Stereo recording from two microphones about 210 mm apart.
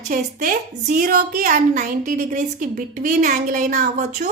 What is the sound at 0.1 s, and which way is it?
A woman's voice, 40° right (ahead or behind).